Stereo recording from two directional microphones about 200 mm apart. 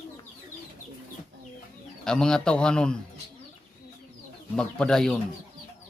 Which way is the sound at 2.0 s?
5° left (ahead or behind).